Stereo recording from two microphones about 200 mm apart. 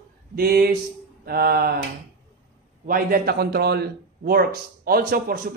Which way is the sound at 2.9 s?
45° right (ahead or behind).